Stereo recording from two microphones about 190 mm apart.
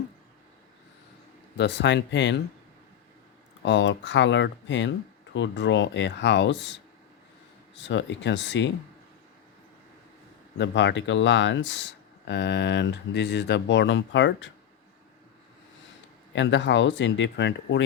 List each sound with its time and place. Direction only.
1.5 s speech: 65° left (ahead or behind)
3.6 s speech: 70° left (ahead or behind)
7.8 s speech: 70° left (ahead or behind)
10.6 s speech: 70° left (ahead or behind)
16.3 s speech: 70° left (ahead or behind)